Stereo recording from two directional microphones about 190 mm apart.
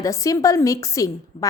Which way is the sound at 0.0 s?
15° left (ahead or behind).